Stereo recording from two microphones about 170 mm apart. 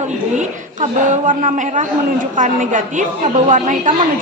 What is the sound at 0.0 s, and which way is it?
A woman's voice, 45° right (ahead or behind).